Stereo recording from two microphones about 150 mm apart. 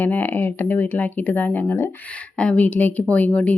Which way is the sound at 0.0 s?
10° left (ahead or behind).